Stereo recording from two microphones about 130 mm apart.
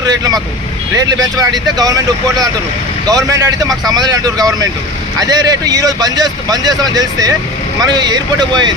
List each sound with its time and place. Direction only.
0.0 s speech: 30° right (ahead or behind)
3.1 s speech: 25° right (ahead or behind)